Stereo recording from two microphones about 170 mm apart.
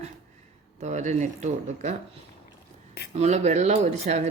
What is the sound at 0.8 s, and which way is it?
Speech, 45° right (ahead or behind).